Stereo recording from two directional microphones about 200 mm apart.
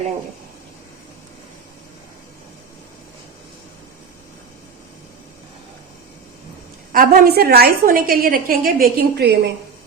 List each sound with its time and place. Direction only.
6.9 s a woman's voice: 45° right (ahead or behind)